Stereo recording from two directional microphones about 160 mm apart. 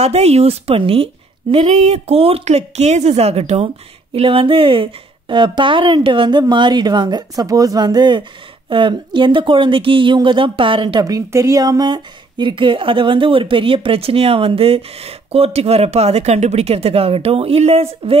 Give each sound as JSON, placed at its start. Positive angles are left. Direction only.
{"t": 0.0, "sound": "a woman's voice", "side_deg": -40}